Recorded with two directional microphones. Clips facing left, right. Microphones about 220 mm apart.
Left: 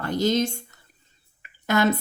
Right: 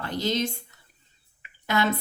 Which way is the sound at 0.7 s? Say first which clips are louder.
Left 3 dB; 45° left (ahead or behind).